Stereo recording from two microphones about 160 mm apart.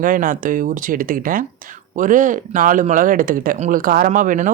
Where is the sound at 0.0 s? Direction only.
60° right (ahead or behind).